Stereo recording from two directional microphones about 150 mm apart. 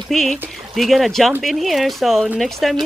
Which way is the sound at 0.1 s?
5° left (ahead or behind).